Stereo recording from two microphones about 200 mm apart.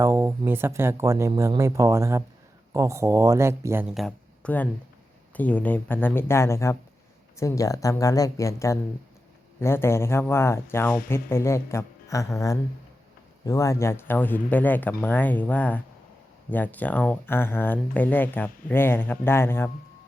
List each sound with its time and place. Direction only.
0.0 s speech: 15° right (ahead or behind); by 19.7 s 10° left (ahead or behind)